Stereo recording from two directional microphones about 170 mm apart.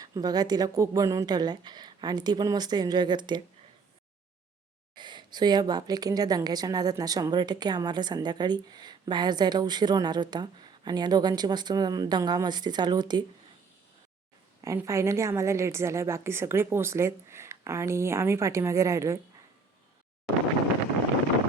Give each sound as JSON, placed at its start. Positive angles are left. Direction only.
{"t": 0.0, "sound": "a woman's voice", "side_deg": -20}
{"t": 4.9, "sound": "a woman's voice", "side_deg": -25}
{"t": 14.6, "sound": "a woman's voice", "side_deg": -20}